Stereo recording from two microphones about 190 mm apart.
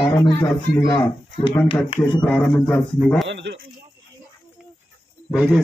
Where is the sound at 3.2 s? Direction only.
65° right (ahead or behind).